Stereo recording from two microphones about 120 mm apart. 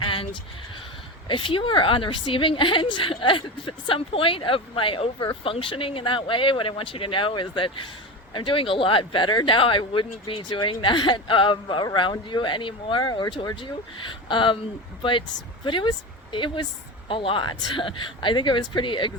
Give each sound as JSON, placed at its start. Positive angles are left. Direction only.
{"t": 0.0, "sound": "a sound", "side_deg": 45}
{"t": 1.3, "sound": "a woman's voice", "side_deg": 45}
{"t": 15.6, "sound": "a woman's voice", "side_deg": 40}